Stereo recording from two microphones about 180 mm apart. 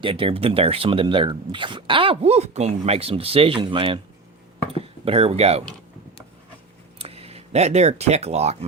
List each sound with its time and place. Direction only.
0.0 s speech: 30° right (ahead or behind)
7.0 s speech: 35° right (ahead or behind)